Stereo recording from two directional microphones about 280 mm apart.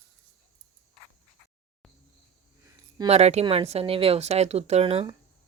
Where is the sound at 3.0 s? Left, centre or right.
Right.